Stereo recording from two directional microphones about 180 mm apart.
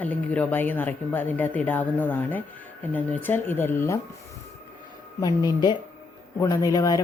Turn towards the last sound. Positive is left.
turn(degrees=20)  # may be behind; listen again after turning